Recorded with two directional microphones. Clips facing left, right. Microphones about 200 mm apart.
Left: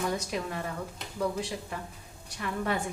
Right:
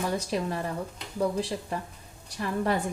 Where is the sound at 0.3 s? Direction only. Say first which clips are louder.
Right 4 dB; 35° right (ahead or behind).